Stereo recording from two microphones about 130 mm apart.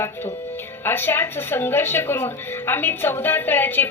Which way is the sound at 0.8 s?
15° left (ahead or behind).